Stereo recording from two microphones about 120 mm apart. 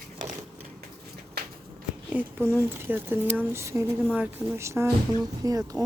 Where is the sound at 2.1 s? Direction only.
15° right (ahead or behind).